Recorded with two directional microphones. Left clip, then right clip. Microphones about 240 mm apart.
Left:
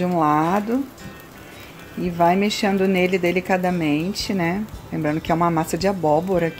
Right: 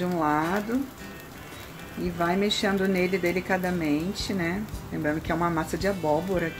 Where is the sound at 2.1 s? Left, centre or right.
Left.